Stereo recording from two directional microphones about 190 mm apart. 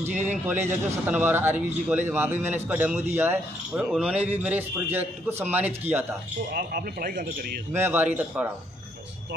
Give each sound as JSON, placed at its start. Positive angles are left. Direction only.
{"t": 0.0, "sound": "a man's voice", "side_deg": -5}
{"t": 6.5, "sound": "speech", "side_deg": -50}
{"t": 7.7, "sound": "a man's voice", "side_deg": -10}